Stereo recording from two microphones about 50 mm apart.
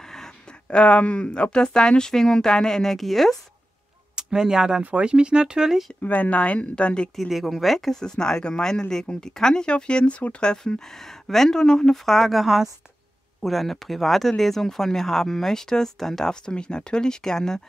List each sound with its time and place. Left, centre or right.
0.7 s speech: left; by 3.3 s centre
4.1 s speech: centre
6.0 s a woman's voice: left
7.2 s speech: centre
16.4 s speech: centre